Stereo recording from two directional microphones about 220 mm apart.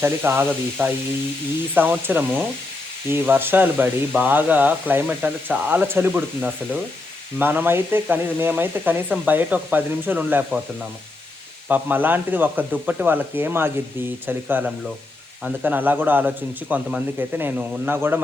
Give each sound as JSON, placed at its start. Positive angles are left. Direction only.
{"t": 0.0, "sound": "speech", "side_deg": -10}
{"t": 11.7, "sound": "speech", "side_deg": -10}